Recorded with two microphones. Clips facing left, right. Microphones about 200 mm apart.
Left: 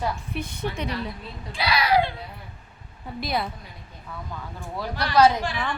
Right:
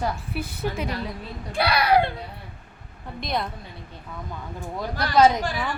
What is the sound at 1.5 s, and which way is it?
Speech, 60° right (ahead or behind).